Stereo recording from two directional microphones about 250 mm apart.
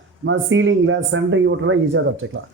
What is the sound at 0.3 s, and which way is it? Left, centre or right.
A man's voice, right.